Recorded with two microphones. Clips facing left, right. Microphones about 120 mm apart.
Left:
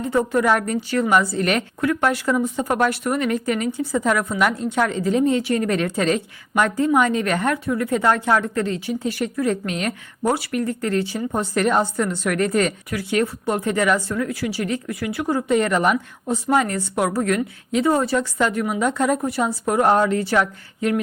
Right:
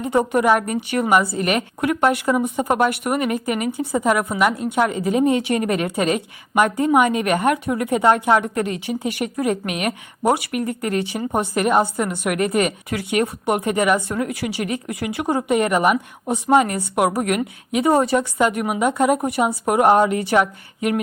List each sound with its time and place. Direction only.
0.0 s a woman's voice: 20° right (ahead or behind)
16.2 s a woman's voice: 25° right (ahead or behind)